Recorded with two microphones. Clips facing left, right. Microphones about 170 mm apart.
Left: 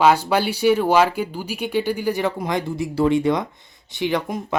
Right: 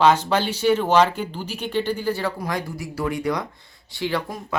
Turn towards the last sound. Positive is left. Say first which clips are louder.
# left 3 dB
turn(degrees=20)  # may be behind; listen again after turning